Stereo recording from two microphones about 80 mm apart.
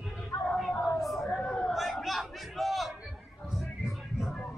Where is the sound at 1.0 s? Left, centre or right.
Centre.